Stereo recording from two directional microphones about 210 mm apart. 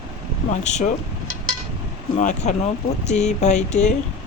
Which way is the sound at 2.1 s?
35° left (ahead or behind).